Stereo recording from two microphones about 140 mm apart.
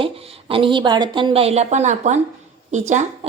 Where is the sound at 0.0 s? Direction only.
45° right (ahead or behind).